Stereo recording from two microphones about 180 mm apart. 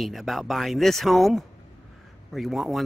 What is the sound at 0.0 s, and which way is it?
Speech, centre (ahead or behind).